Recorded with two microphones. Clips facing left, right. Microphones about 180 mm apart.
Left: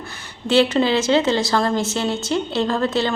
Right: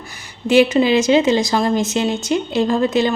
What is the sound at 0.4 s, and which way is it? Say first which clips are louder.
A woman's voice: right 3 dB; 10° right (ahead or behind).